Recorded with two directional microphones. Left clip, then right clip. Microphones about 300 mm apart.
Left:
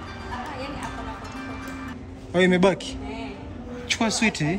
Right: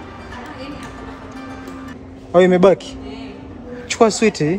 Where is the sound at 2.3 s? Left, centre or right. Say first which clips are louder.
Right 8 dB; centre.